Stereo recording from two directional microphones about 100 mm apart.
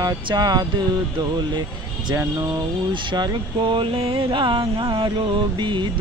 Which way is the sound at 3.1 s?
45° right (ahead or behind).